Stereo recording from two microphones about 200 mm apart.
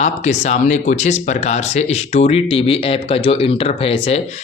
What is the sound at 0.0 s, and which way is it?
Speech, 35° left (ahead or behind).